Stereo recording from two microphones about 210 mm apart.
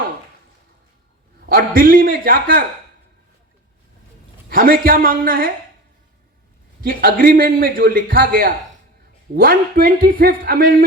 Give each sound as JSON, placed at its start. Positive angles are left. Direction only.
{"t": 1.5, "sound": "a man's voice", "side_deg": -45}
{"t": 4.4, "sound": "a man's voice", "side_deg": -45}
{"t": 6.8, "sound": "a man's voice", "side_deg": -45}